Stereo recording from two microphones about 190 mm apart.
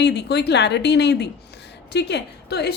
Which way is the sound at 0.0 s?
60° left (ahead or behind).